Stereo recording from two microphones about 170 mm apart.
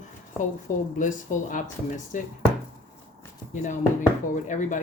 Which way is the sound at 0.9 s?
50° left (ahead or behind).